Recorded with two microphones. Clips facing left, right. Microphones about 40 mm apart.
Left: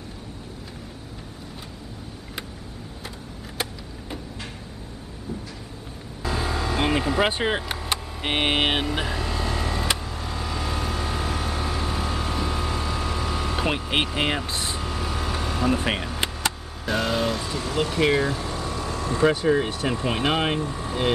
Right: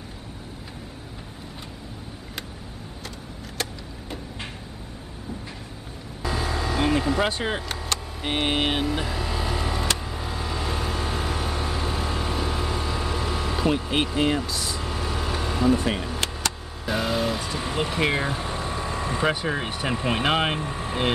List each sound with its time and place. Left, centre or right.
6.2 s vehicle: centre
8.2 s vehicle: left
9.0 s a sound: centre
9.9 s vehicle: centre
13.7 s vehicle: left
14.1 s speech: left
14.8 s vehicle: centre
16.2 s vehicle: centre
16.8 s vehicle: centre
17.6 s speech: centre
20.6 s speech: right